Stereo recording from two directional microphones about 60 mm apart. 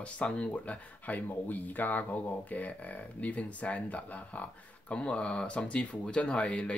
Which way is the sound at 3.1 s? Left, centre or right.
Left.